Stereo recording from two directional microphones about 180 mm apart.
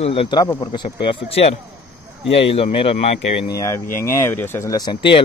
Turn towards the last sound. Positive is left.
turn(degrees=30)  # may be behind; listen again after turning